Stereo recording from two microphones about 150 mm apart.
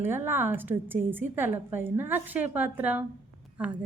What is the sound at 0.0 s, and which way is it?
Speech, 15° right (ahead or behind).